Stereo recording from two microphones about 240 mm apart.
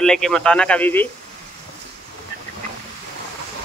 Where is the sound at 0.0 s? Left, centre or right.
Centre.